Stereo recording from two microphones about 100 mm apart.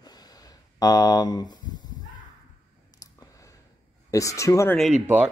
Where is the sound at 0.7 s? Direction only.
40° left (ahead or behind).